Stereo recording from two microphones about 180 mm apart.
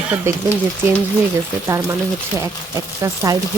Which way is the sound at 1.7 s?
15° right (ahead or behind).